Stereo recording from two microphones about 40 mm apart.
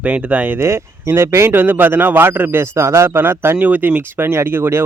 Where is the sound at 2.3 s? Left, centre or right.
Right.